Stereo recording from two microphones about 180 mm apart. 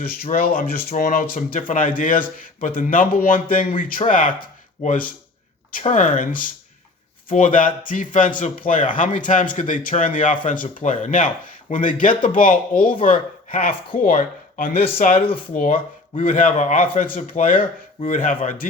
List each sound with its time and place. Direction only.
0.1 s speech: 55° left (ahead or behind)
15.1 s speech: 30° left (ahead or behind)
15.5 s speech: 50° left (ahead or behind)